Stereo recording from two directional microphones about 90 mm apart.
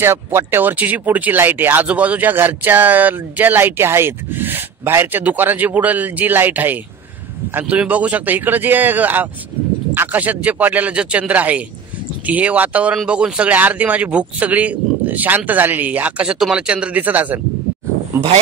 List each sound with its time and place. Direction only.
0.0 s speech: 30° right (ahead or behind)